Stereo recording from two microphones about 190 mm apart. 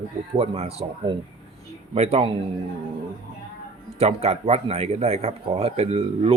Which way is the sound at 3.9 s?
35° right (ahead or behind).